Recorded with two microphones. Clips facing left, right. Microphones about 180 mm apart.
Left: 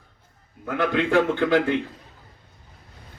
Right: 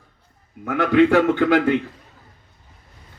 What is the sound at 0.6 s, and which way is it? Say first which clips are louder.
A man's voice: right 7 dB; 65° right (ahead or behind).